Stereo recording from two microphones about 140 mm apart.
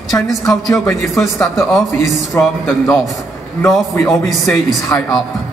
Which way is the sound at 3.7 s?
Centre (ahead or behind).